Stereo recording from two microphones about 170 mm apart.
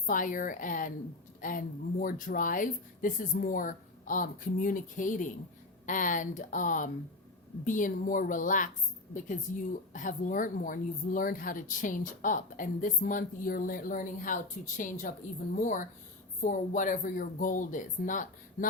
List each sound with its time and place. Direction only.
0.0 s speech: 50° left (ahead or behind)